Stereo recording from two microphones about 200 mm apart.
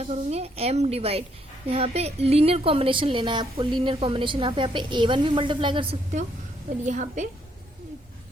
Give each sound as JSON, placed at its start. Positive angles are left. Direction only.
{"t": 0.0, "sound": "a woman's voice", "side_deg": -30}
{"t": 6.8, "sound": "a woman's voice", "side_deg": -40}